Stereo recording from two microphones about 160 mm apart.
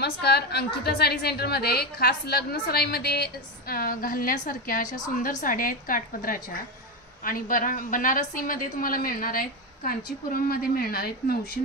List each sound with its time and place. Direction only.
0.0 s a woman's voice: 90° left; by 11.6 s 70° left (ahead or behind)